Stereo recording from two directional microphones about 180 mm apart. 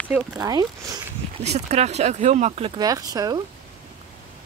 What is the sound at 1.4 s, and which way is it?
Speech, 35° right (ahead or behind).